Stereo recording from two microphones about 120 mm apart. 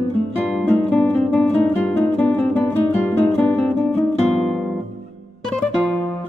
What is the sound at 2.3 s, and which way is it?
Music, 15° left (ahead or behind).